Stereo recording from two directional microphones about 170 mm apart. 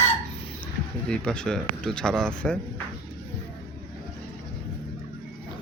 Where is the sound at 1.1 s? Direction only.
5° left (ahead or behind).